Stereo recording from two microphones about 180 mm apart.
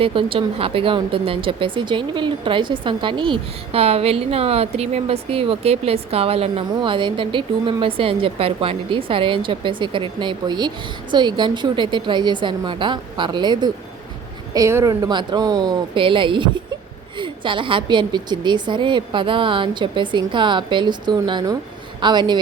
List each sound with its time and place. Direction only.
0.0 s speech: 30° right (ahead or behind)